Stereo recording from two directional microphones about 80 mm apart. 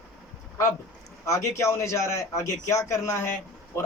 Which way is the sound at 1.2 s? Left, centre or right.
Left.